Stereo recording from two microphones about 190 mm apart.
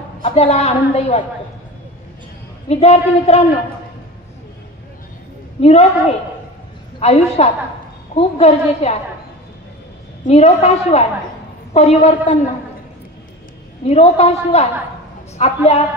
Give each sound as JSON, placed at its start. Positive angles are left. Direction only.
{"t": 0.2, "sound": "a woman's voice", "side_deg": 35}
{"t": 2.7, "sound": "a woman's voice", "side_deg": 35}
{"t": 5.6, "sound": "a woman's voice", "side_deg": 35}
{"t": 10.2, "sound": "a woman's voice", "side_deg": 35}
{"t": 13.8, "sound": "a woman's voice", "side_deg": 35}